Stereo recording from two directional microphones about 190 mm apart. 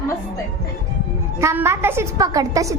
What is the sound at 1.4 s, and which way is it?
A woman's voice, 15° right (ahead or behind).